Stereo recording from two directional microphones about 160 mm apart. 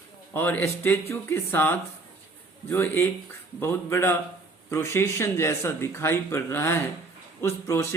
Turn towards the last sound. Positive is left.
turn(degrees=20)  # may be behind; listen again after turning